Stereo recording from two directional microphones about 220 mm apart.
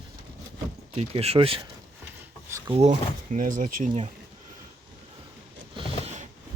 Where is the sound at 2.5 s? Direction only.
10° right (ahead or behind).